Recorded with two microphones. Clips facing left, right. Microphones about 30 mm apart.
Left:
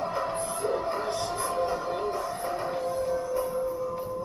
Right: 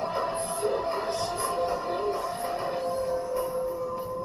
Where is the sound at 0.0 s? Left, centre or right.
Right.